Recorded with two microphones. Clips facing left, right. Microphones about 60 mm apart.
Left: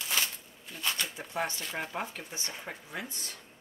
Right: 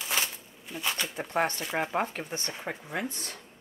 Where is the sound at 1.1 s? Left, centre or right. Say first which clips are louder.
Right 6 dB; right.